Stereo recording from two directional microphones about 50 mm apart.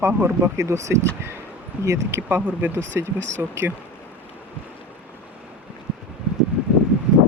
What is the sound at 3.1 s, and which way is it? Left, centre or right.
Speech, right.